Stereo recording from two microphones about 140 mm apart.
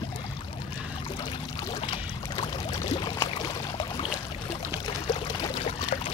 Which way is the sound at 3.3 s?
35° left (ahead or behind).